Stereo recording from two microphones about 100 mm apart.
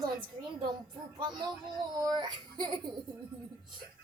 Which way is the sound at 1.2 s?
45° right (ahead or behind).